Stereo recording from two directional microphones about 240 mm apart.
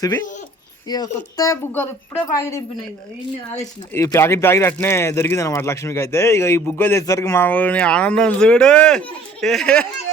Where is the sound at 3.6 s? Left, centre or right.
Centre.